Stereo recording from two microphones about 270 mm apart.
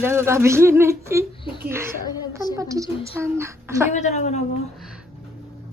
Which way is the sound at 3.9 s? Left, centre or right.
Left.